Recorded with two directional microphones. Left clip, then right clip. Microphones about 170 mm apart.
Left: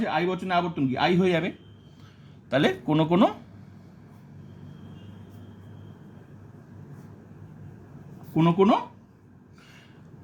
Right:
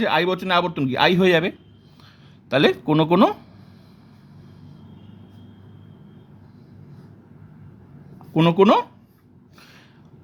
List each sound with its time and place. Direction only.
0.0 s speech: 55° right (ahead or behind); by 3.3 s 30° right (ahead or behind)
8.4 s speech: 55° right (ahead or behind)